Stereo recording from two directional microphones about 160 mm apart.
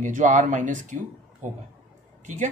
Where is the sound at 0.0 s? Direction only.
50° right (ahead or behind).